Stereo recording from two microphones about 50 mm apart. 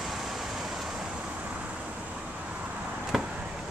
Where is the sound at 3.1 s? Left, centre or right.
Centre.